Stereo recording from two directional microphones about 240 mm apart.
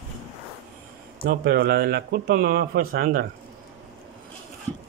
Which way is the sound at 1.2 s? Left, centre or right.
Right.